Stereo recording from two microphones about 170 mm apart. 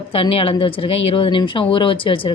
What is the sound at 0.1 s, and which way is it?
A woman's voice, 30° left (ahead or behind).